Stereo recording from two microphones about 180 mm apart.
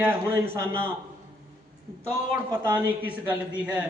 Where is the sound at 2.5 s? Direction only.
10° right (ahead or behind).